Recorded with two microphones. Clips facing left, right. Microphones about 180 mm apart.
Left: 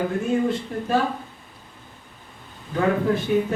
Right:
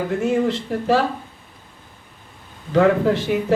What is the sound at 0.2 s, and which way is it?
Speech, 90° right.